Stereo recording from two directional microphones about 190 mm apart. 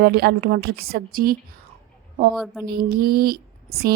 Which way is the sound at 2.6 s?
50° right (ahead or behind).